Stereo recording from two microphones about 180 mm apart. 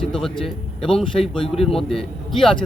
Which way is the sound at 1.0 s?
30° left (ahead or behind).